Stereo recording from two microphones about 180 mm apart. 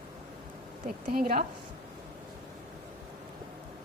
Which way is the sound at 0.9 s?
50° right (ahead or behind).